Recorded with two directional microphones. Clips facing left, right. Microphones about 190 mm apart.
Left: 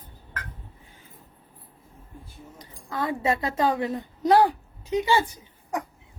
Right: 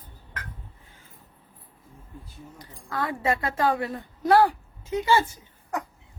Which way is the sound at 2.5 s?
20° left (ahead or behind).